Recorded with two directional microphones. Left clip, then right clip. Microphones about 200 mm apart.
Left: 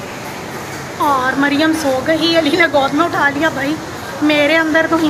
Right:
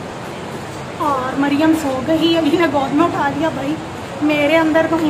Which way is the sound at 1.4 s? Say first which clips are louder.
Left 1 dB; 5° right (ahead or behind).